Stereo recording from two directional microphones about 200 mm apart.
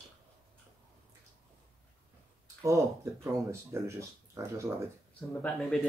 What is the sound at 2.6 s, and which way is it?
Speech, 15° right (ahead or behind).